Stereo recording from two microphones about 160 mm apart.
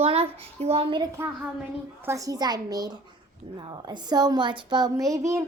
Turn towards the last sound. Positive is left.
turn(degrees=-20)  # may be behind; listen again after turning